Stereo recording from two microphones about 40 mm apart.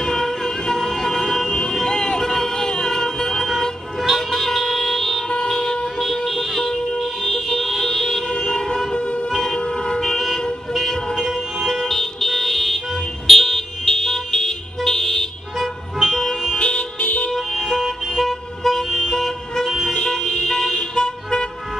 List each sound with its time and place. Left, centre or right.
0.0 s vehicle: centre
1.9 s a sound: centre
3.0 s vehicle: centre
8.9 s music: left
9.3 s vehicle: centre
9.6 s vehicle: centre
11.9 s car alarm: centre
13.3 s vehicle: centre
16.0 s car alarm: centre
16.5 s car alarm: left
17.3 s vehicle: centre
19.9 s vehicle: centre